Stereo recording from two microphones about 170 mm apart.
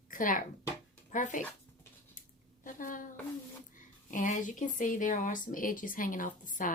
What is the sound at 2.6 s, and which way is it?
Speech, 50° left (ahead or behind).